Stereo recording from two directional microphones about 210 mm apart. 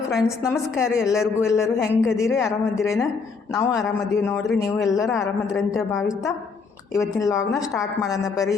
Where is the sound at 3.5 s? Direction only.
Centre (ahead or behind).